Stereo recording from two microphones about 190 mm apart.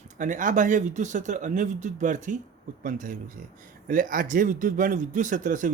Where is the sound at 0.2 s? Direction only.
40° right (ahead or behind).